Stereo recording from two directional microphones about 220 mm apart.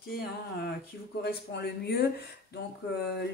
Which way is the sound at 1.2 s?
50° left (ahead or behind).